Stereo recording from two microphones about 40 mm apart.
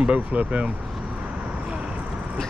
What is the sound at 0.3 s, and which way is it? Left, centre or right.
Speech, right.